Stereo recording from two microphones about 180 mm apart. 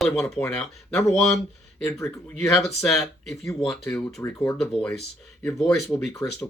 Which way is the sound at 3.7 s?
5° left (ahead or behind).